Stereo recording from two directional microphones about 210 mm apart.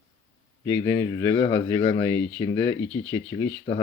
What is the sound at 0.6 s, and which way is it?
Speech, 15° left (ahead or behind).